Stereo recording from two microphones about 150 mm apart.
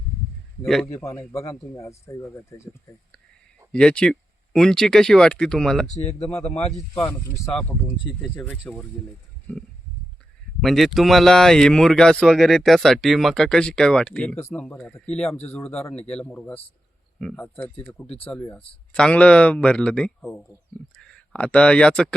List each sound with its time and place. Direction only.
0.6 s speech: centre (ahead or behind)
0.9 s speech: 20° left (ahead or behind)
3.7 s speech: 5° left (ahead or behind)
5.9 s speech: 50° left (ahead or behind)
7.0 s speech: 15° left (ahead or behind)
9.5 s a sound: 10° left (ahead or behind)
10.6 s speech: centre (ahead or behind)
15.3 s speech: 45° left (ahead or behind)
15.5 s speech: 5° left (ahead or behind)